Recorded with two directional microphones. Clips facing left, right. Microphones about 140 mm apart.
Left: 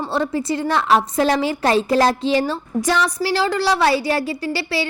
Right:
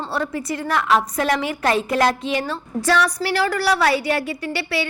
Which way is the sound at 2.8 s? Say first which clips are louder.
Even; 20° left (ahead or behind).